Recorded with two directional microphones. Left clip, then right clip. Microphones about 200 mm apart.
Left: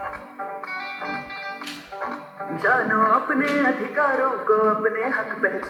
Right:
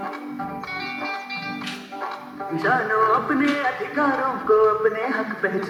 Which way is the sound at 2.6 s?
25° right (ahead or behind).